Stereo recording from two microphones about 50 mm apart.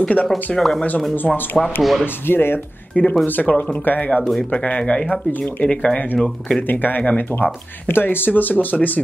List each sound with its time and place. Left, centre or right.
0.0 s speech: left
0.6 s speech: centre
1.1 s speech: left
1.8 s speech: centre
2.2 s speech: left
2.9 s speech: left
4.6 s speech: left
6.1 s speech: centre
6.7 s speech: left